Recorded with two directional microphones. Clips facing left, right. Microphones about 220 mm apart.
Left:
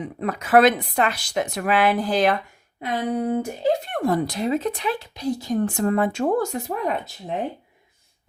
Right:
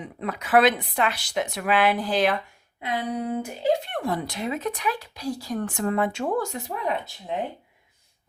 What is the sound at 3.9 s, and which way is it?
Speech, 45° left (ahead or behind).